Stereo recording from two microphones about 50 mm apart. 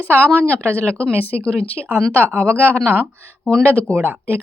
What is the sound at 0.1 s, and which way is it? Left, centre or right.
Speech, right.